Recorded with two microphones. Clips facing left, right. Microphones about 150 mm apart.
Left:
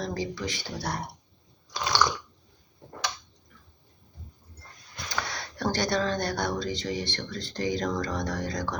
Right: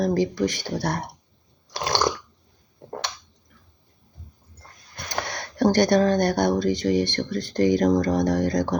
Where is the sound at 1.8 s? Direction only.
45° right (ahead or behind).